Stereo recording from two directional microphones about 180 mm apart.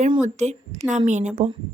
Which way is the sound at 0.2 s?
40° right (ahead or behind).